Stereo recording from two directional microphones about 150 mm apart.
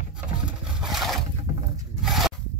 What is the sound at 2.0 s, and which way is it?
Zipper, centre (ahead or behind).